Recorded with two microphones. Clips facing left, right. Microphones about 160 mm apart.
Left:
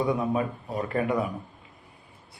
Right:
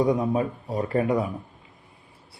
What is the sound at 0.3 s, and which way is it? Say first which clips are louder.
Speech: right 3 dB; 30° right (ahead or behind).